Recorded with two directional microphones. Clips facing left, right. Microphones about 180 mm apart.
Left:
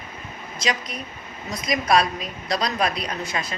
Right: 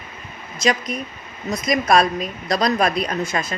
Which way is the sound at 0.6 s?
50° right (ahead or behind).